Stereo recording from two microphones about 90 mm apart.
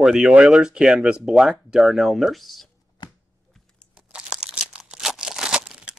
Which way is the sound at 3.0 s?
60° left (ahead or behind).